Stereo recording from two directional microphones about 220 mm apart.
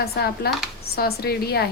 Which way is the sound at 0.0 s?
45° left (ahead or behind).